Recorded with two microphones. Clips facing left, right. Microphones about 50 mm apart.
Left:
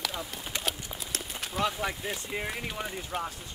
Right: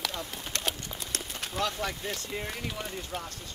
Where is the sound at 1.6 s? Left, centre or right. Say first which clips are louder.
Left 2 dB; centre.